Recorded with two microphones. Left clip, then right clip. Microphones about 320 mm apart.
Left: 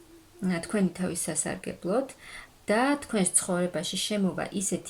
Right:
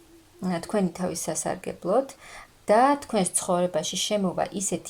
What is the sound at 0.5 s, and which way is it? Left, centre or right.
Speech, centre.